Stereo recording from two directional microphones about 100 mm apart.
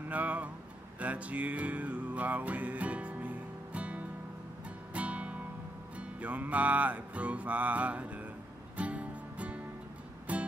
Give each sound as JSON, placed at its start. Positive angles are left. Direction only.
{"t": 0.1, "sound": "speech", "side_deg": -15}
{"t": 0.9, "sound": "music", "side_deg": -15}